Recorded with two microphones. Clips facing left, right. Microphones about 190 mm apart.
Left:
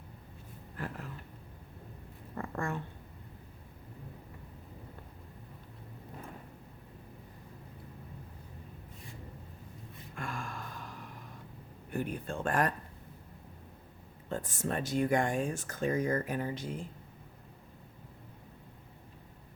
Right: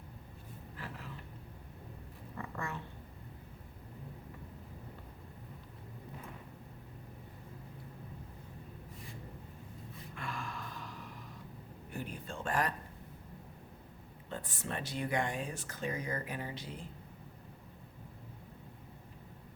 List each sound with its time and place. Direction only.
0.8 s a sound: 50° left (ahead or behind)
2.3 s cat: 50° left (ahead or behind)
10.2 s gasp: 45° left (ahead or behind)
11.9 s speech: 55° left (ahead or behind)
14.3 s speech: 45° left (ahead or behind)